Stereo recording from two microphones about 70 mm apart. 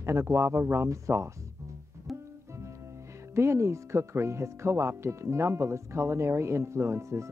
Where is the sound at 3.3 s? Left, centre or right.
Right.